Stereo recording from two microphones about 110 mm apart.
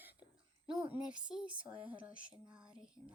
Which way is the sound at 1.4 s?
50° right (ahead or behind).